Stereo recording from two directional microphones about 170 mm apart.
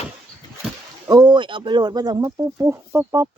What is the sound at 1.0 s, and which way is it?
Speech, 20° right (ahead or behind).